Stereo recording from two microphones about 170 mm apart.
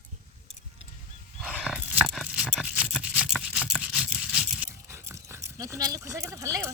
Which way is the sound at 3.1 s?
5° right (ahead or behind).